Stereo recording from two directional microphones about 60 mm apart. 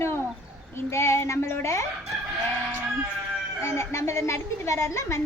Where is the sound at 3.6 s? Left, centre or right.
Left.